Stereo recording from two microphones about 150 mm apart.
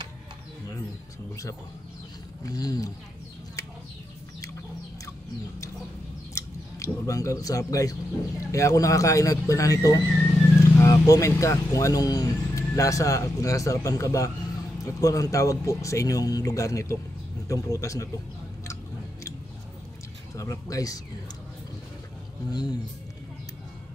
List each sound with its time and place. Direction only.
2.4 s speech: 25° left (ahead or behind)
6.3 s speech: 20° left (ahead or behind)
10.0 s speech: 5° left (ahead or behind)
10.6 s speech: 20° left (ahead or behind)
20.3 s speech: 20° left (ahead or behind)
22.5 s speech: 30° left (ahead or behind)